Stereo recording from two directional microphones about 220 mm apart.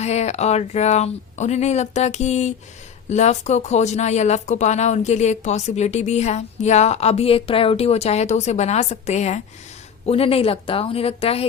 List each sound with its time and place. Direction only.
0.0 s a woman's voice: 30° left (ahead or behind)